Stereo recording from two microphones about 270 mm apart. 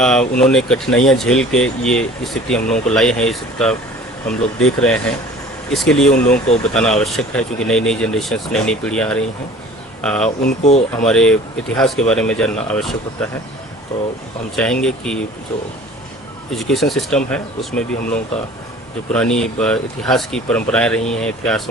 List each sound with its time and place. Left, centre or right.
0.0 s speech: centre
10.2 s speech: left
10.9 s speech: centre
14.5 s speech: centre
16.5 s speech: centre